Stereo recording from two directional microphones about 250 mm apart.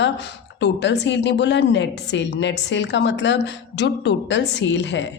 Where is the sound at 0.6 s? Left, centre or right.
Left.